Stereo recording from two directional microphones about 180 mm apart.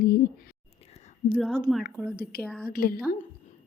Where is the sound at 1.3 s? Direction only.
Centre (ahead or behind).